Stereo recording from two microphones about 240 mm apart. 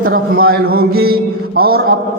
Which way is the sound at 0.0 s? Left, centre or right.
Right.